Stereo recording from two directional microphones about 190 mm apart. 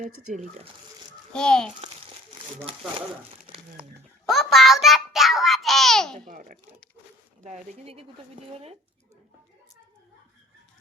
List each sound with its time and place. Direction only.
0.0 s speech: 35° right (ahead or behind)
1.3 s a child's voice: 5° left (ahead or behind)
2.4 s crumpling: 25° right (ahead or behind)
4.3 s babbling: centre (ahead or behind)
6.1 s a child's voice: 40° right (ahead or behind)